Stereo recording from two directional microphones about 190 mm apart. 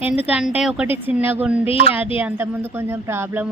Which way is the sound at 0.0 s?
10° right (ahead or behind).